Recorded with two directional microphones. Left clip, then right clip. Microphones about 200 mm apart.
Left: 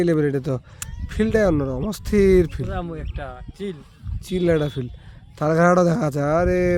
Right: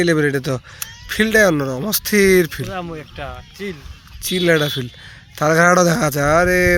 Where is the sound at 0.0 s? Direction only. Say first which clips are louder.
Right 4 dB; centre (ahead or behind).